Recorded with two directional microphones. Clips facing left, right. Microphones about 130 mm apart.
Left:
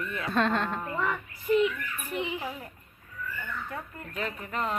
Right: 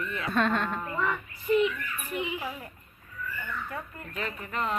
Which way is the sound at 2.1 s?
35° left (ahead or behind).